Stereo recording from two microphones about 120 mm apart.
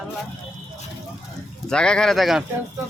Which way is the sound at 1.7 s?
5° left (ahead or behind).